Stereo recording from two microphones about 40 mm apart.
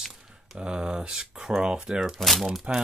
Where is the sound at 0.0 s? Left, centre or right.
Centre.